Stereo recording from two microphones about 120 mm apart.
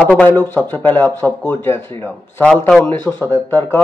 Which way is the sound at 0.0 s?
15° left (ahead or behind).